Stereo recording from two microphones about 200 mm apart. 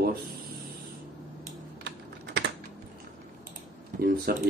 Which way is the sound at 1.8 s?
55° right (ahead or behind).